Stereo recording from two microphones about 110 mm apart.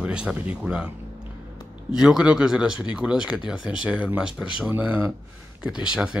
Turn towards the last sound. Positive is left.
turn(degrees=-10)  # may be behind; listen again after turning